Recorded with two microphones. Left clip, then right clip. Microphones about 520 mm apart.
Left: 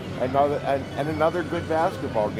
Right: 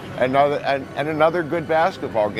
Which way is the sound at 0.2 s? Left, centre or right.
Right.